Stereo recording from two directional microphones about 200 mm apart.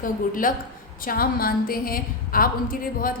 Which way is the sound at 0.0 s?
45° left (ahead or behind).